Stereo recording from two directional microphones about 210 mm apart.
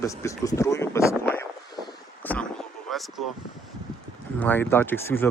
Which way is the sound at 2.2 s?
5° left (ahead or behind).